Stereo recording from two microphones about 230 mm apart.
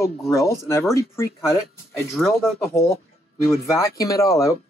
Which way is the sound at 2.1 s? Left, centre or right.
Centre.